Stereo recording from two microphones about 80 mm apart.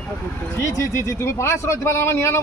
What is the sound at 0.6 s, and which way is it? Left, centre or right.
A man's voice, left.